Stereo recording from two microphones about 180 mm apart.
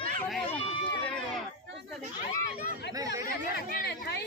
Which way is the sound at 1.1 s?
5° left (ahead or behind).